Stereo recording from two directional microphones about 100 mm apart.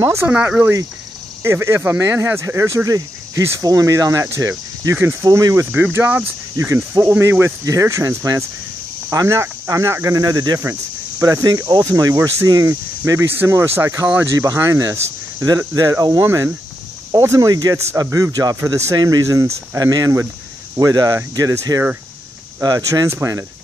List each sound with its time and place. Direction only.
0.0 s speech: 25° right (ahead or behind)
0.3 s speech: 15° right (ahead or behind)
1.4 s speech: 30° right (ahead or behind)
5.7 s speech: 20° right (ahead or behind); by 10.6 s 40° right (ahead or behind)
10.6 s speech: 25° right (ahead or behind)